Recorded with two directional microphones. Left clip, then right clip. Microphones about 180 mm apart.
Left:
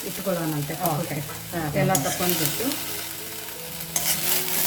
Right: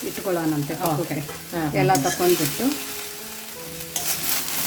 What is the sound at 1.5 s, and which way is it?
Stir, 25° right (ahead or behind).